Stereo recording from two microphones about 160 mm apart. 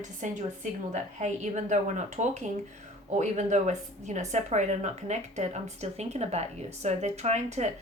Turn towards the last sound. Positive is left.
turn(degrees=-45)  # may be behind; listen again after turning